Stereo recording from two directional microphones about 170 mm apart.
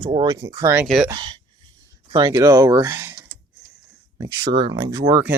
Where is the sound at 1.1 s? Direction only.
25° right (ahead or behind).